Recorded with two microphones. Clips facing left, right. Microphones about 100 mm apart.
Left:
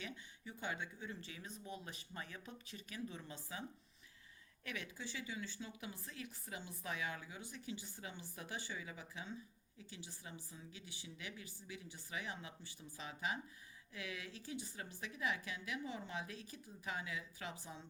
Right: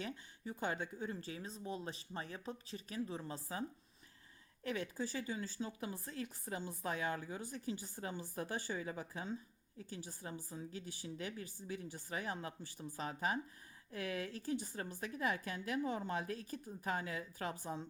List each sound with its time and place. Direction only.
0.0 s speech: 40° right (ahead or behind)